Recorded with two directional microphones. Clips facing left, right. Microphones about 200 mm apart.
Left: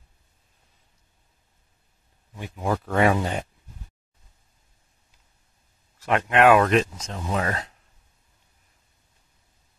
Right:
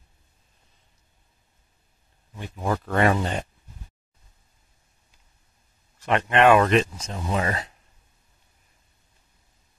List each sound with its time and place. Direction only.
2.5 s speech: 5° left (ahead or behind)
5.9 s speech: 5° left (ahead or behind)